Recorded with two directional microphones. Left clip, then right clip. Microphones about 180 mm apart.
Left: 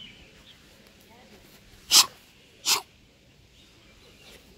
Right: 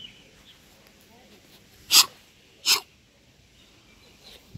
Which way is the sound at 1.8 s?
10° left (ahead or behind).